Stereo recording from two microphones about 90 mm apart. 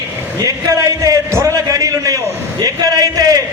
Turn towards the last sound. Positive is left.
turn(degrees=-45)  # may be behind; listen again after turning